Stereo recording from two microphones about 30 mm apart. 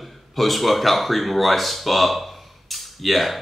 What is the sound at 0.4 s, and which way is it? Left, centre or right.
Speech, centre.